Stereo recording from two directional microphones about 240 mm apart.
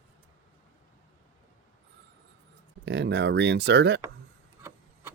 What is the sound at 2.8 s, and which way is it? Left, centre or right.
Speech, right.